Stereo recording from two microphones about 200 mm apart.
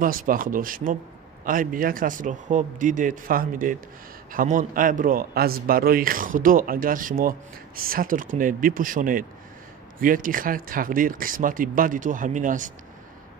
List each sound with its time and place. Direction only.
0.0 s a man's voice: 45° right (ahead or behind)